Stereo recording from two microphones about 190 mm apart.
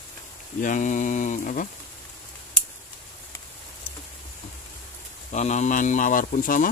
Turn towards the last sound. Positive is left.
turn(degrees=45)  # may be behind; listen again after turning